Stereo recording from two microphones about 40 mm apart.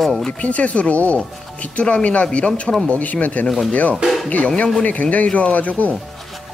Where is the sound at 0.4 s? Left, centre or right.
Left.